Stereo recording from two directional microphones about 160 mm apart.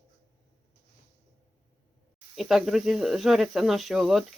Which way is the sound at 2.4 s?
Centre (ahead or behind).